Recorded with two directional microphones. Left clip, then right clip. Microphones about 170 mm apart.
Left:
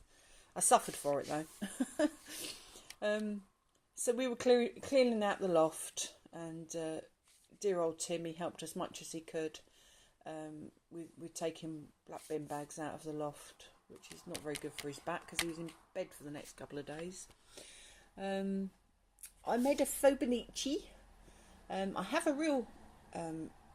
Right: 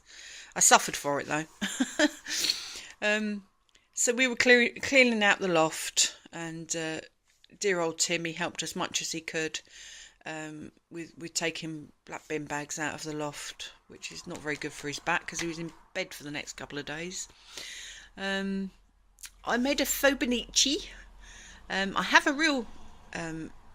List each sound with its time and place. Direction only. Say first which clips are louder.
0.5 s speech: right 8 dB; 10° right (ahead or behind)
1.0 s speech: right 6 dB; 25° right (ahead or behind)
12.8 s a woman's voice: right 8 dB; 15° right (ahead or behind)
23.0 s a sound: right 6 dB; 10° right (ahead or behind)